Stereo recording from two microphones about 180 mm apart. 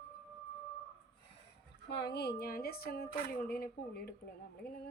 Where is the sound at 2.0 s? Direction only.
65° left (ahead or behind).